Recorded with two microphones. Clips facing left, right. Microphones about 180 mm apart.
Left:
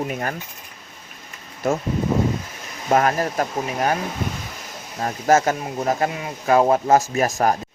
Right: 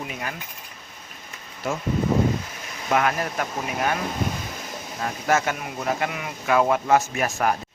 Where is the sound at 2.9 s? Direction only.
40° left (ahead or behind).